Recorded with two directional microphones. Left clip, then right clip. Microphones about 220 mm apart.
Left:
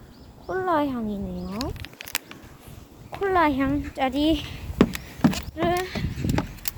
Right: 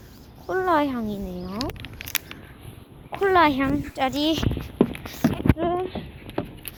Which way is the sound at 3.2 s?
Centre (ahead or behind).